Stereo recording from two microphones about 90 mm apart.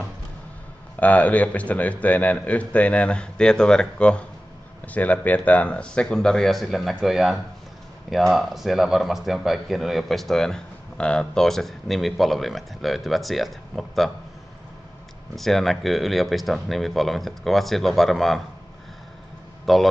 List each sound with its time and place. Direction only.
0.9 s speech: 15° left (ahead or behind); by 14.1 s centre (ahead or behind)
15.3 s speech: centre (ahead or behind)
19.6 s speech: centre (ahead or behind)